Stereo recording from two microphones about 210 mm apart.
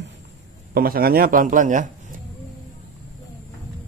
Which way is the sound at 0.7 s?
45° right (ahead or behind).